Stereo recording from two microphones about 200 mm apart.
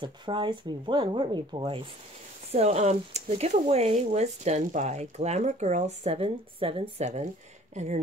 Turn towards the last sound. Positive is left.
turn(degrees=-35)  # may be behind; listen again after turning